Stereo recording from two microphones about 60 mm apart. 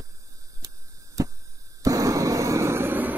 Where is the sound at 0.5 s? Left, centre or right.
Right.